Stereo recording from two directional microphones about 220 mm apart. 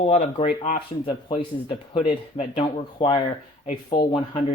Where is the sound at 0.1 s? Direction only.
30° left (ahead or behind).